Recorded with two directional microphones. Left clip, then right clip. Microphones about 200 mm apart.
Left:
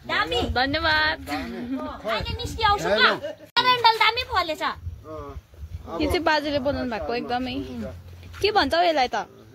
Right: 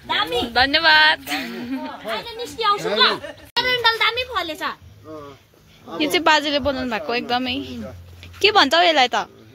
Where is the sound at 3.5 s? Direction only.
40° left (ahead or behind).